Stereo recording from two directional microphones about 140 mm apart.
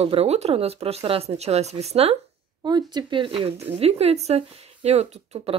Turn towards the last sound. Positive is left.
turn(degrees=-50)  # may be behind; listen again after turning